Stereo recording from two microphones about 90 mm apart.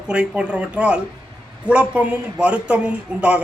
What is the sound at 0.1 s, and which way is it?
A man's voice, 10° right (ahead or behind).